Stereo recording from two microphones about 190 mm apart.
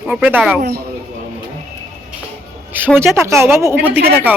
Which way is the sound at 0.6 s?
55° right (ahead or behind).